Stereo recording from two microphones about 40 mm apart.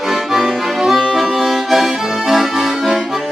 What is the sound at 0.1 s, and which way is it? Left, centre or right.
Accordion, centre.